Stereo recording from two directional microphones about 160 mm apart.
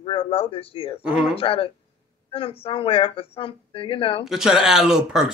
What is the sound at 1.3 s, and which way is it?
Speech, 35° left (ahead or behind).